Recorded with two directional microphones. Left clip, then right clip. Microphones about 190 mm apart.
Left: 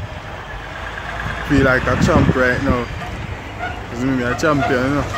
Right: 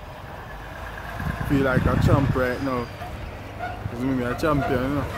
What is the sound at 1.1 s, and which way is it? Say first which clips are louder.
Vehicle: left 6 dB; 50° right (ahead or behind).